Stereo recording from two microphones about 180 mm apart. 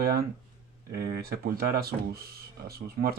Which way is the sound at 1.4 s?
55° right (ahead or behind).